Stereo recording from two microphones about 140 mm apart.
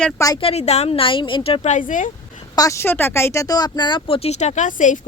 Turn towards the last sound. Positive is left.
turn(degrees=65)  # may be behind; listen again after turning